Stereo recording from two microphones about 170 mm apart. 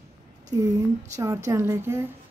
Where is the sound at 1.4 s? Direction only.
15° right (ahead or behind).